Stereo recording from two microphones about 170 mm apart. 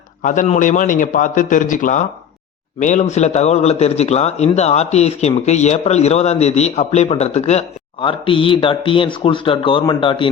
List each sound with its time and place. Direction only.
0.2 s a man's voice: 50° left (ahead or behind); by 10.2 s 30° left (ahead or behind)